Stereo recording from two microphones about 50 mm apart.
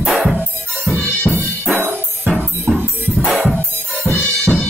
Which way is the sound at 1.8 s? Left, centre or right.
Right.